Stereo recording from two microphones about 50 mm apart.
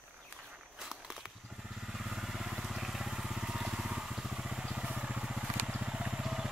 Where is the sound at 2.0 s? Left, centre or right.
Centre.